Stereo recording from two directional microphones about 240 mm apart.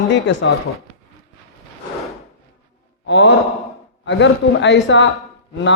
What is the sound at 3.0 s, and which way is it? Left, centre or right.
Speech, left.